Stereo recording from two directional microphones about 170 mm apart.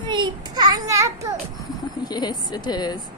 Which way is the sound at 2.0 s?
25° left (ahead or behind).